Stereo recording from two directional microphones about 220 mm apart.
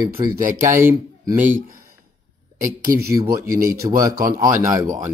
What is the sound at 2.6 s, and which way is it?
Speech, 40° right (ahead or behind).